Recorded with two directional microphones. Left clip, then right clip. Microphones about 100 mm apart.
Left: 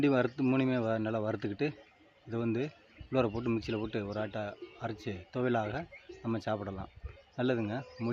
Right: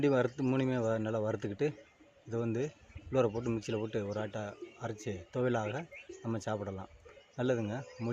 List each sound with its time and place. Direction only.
0.0 s speech: 40° left (ahead or behind)